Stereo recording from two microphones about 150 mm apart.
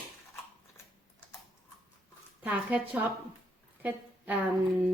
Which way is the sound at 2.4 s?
10° right (ahead or behind).